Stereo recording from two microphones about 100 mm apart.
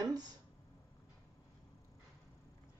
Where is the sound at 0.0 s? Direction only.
40° right (ahead or behind).